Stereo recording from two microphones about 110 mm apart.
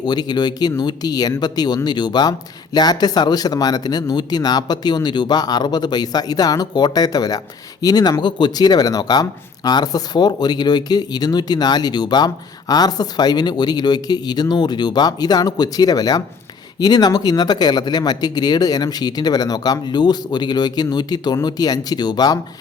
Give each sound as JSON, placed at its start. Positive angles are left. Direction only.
{"t": 0.0, "sound": "speech", "side_deg": 40}